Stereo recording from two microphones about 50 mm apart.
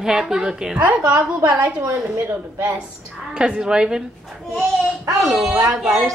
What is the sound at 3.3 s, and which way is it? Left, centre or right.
Speech, centre.